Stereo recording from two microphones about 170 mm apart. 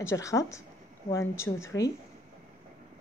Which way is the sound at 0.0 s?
15° left (ahead or behind).